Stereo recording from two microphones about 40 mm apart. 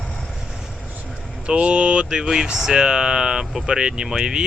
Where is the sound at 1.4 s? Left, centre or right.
Right.